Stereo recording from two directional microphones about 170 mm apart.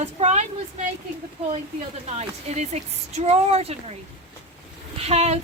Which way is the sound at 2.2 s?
40° right (ahead or behind).